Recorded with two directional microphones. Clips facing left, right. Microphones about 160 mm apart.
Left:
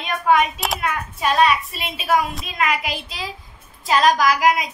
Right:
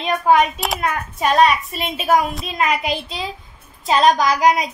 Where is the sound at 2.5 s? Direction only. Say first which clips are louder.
Right 2 dB; 30° right (ahead or behind).